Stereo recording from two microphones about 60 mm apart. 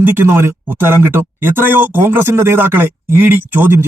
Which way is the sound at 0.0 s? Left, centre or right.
Right.